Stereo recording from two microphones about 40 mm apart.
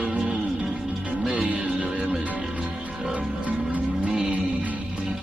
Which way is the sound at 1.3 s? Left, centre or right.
Right.